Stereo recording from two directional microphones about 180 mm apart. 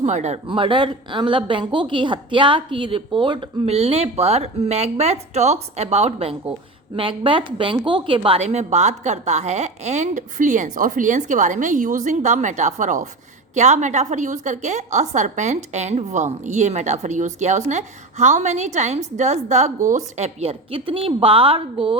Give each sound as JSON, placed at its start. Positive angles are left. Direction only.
{"t": 0.0, "sound": "a woman's voice", "side_deg": -40}